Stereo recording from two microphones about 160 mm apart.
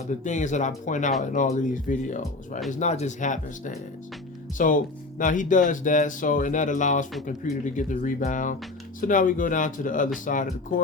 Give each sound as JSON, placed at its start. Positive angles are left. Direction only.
{"t": 0.3, "sound": "speech", "side_deg": 50}